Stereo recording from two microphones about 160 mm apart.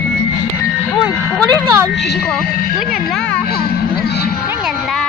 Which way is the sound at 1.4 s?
20° right (ahead or behind).